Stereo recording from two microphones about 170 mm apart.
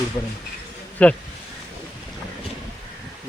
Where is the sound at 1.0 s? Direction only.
10° left (ahead or behind).